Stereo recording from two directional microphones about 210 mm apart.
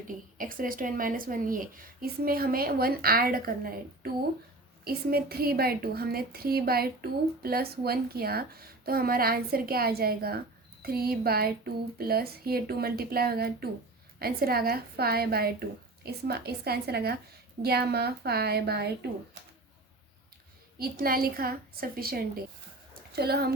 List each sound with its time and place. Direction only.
0.3 s a woman's voice: 40° right (ahead or behind)
20.7 s a woman's voice: 45° right (ahead or behind)